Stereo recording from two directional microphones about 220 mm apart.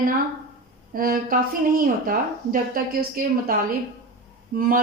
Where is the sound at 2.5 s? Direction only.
40° right (ahead or behind).